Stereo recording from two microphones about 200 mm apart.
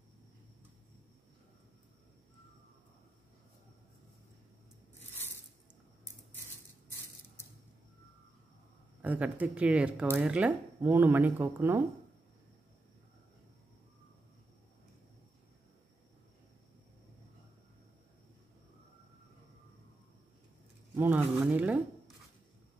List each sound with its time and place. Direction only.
5.1 s a sound: 10° left (ahead or behind)
9.0 s speech: 10° right (ahead or behind)
20.9 s speech: 10° right (ahead or behind)